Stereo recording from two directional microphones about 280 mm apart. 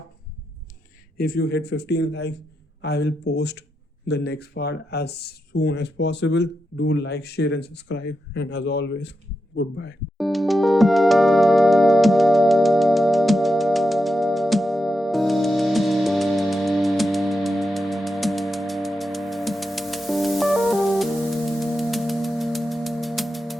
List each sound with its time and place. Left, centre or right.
1.1 s speech: left
10.2 s music: centre